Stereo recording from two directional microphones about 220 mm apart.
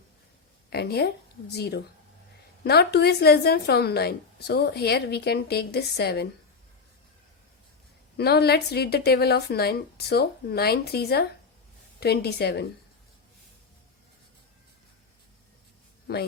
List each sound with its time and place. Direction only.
0.7 s a woman's voice: 45° left (ahead or behind)
8.1 s a woman's voice: 45° left (ahead or behind)
16.1 s a woman's voice: 50° left (ahead or behind)